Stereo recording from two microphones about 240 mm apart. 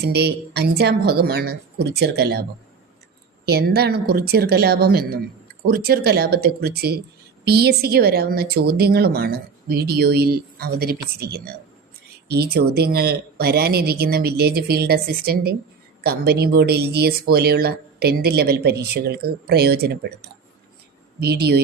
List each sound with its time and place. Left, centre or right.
0.0 s speech: right
3.4 s speech: right
21.2 s speech: right